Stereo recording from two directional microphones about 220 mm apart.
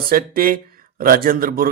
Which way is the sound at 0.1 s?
40° right (ahead or behind).